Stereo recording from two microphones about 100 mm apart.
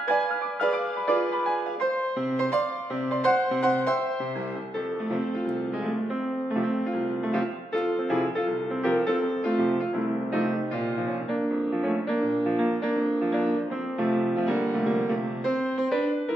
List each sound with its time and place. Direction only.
0.1 s music: 10° left (ahead or behind)
3.3 s music: 10° left (ahead or behind)
8.8 s music: 5° left (ahead or behind)
11.9 s music: centre (ahead or behind)